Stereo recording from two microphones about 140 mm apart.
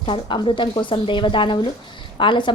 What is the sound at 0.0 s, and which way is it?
A woman's voice, 40° left (ahead or behind).